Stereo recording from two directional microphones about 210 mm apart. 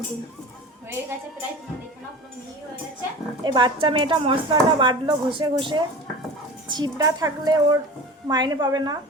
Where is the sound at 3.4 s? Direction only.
20° right (ahead or behind).